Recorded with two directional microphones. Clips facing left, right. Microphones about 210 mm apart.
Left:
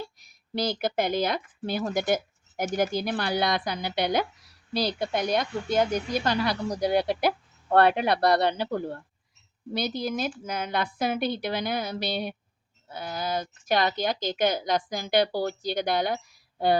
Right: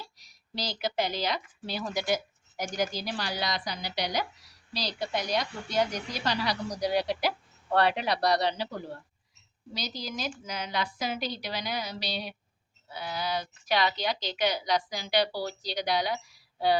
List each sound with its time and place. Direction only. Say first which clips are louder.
0.0 s a woman's voice: left 9 dB; 55° left (ahead or behind)